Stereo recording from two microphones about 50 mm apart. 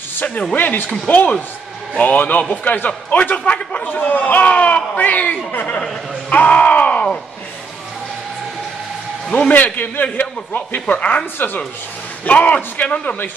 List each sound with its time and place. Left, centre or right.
0.1 s a sound: left
0.6 s speech: left
6.3 s a man's voice: left
9.5 s speech: left
11.3 s speech: left
12.3 s a man's voice: left